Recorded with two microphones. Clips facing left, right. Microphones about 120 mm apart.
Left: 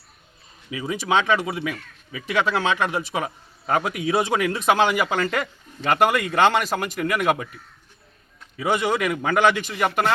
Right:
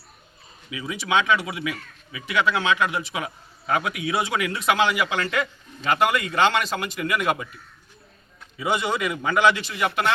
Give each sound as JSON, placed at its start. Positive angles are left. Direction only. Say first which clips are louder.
{"t": 0.7, "sound": "speech", "louder": "left 2 dB", "side_deg": 40}